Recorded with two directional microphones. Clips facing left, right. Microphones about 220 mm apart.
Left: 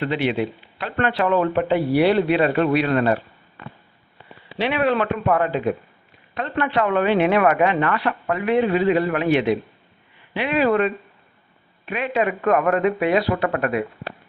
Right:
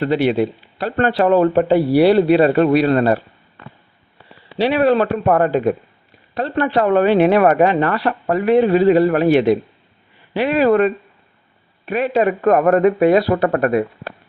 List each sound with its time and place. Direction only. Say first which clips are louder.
0.0 s a woman's voice: right 6 dB; 40° right (ahead or behind)
4.5 s a woman's voice: right 6 dB; 35° right (ahead or behind)